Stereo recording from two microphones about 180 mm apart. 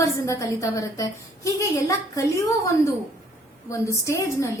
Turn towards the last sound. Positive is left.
turn(degrees=15)  # may be behind; listen again after turning